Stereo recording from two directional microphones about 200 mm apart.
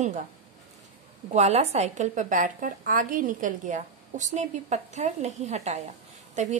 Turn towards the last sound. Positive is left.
turn(degrees=-35)  # may be behind; listen again after turning